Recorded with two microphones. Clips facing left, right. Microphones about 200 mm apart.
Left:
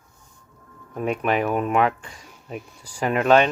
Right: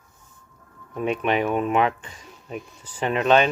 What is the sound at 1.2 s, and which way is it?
Speech, 30° right (ahead or behind).